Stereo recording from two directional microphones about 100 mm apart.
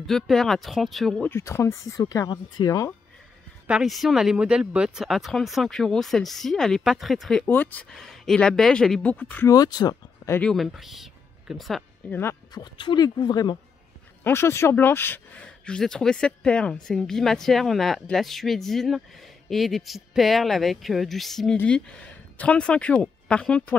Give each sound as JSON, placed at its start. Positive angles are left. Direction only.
{"t": 0.0, "sound": "speech", "side_deg": 5}
{"t": 1.2, "sound": "speech", "side_deg": 25}
{"t": 3.6, "sound": "speech", "side_deg": -5}
{"t": 7.4, "sound": "speech", "side_deg": 20}
{"t": 7.9, "sound": "speech", "side_deg": 5}
{"t": 9.5, "sound": "speech", "side_deg": 40}
{"t": 10.4, "sound": "speech", "side_deg": 0}
{"t": 12.1, "sound": "speech", "side_deg": 25}
{"t": 12.5, "sound": "speech", "side_deg": 50}
{"t": 14.2, "sound": "speech", "side_deg": 25}